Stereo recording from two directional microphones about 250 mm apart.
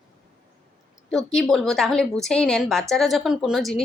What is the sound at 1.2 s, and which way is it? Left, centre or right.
A woman's voice, centre.